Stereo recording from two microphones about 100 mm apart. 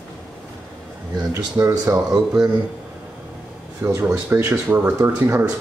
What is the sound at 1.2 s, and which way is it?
Speech, 35° right (ahead or behind).